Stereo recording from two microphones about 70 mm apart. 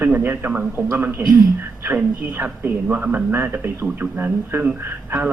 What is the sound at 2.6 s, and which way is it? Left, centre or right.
A man's voice, right.